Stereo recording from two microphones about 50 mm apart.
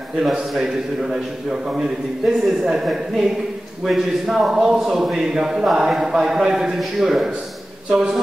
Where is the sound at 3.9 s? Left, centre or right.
Centre.